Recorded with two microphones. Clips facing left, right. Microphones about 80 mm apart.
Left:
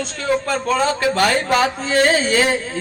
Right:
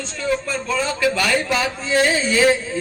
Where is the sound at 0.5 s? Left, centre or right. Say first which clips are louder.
Left 4 dB; left.